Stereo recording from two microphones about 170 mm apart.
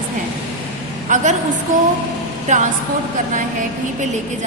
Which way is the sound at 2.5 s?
45° right (ahead or behind).